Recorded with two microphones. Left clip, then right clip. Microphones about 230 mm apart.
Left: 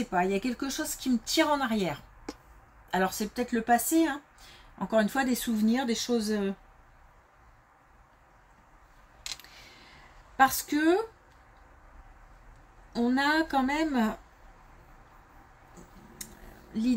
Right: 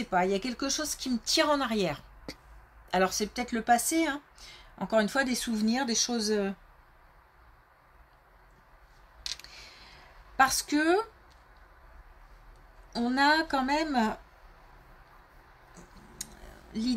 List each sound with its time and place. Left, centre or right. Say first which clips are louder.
0.1 s speech: right 1 dB; right
9.4 s a sound: right 2 dB; right
10.3 s speech: left 1 dB; right
12.9 s speech: right 1 dB; right